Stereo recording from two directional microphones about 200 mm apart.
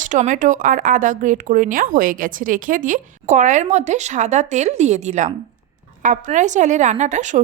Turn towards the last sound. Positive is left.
turn(degrees=-35)  # may be behind; listen again after turning